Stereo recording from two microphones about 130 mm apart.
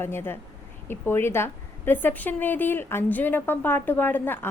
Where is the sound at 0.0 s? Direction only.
15° left (ahead or behind).